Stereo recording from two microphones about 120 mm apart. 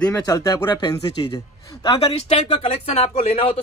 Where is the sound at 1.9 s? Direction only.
55° left (ahead or behind).